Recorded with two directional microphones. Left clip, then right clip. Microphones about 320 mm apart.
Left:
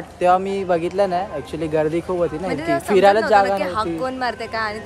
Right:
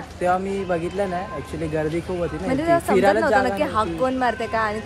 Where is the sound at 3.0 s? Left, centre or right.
Centre.